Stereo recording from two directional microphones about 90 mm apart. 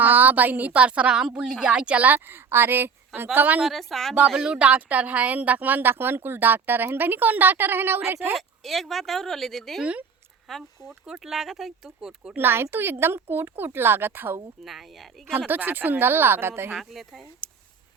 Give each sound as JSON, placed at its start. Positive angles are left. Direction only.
{"t": 0.0, "sound": "speech", "side_deg": -20}
{"t": 3.6, "sound": "speech", "side_deg": 0}
{"t": 8.4, "sound": "speech", "side_deg": 0}
{"t": 12.4, "sound": "speech", "side_deg": -25}
{"t": 14.6, "sound": "speech", "side_deg": 0}
{"t": 15.3, "sound": "speech", "side_deg": -20}
{"t": 16.7, "sound": "speech", "side_deg": 0}